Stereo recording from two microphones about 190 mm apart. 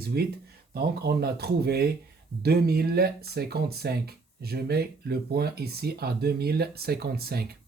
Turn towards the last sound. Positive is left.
turn(degrees=-55)  # may be behind; listen again after turning